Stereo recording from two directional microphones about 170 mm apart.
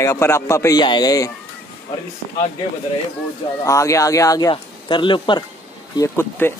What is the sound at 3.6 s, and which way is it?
Speech, 20° left (ahead or behind).